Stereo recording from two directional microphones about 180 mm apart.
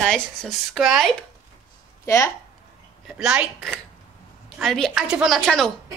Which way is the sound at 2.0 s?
15° left (ahead or behind).